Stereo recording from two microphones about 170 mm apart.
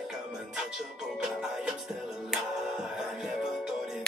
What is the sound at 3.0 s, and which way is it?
Music, centre (ahead or behind).